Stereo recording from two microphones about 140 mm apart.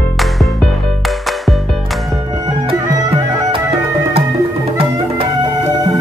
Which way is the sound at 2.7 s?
40° right (ahead or behind).